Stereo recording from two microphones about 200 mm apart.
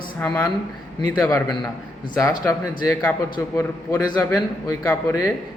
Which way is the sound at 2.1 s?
15° left (ahead or behind).